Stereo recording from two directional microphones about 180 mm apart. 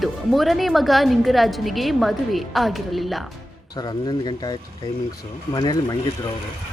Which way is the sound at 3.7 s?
20° left (ahead or behind).